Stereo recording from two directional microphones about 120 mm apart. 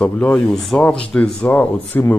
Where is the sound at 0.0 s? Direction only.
10° left (ahead or behind).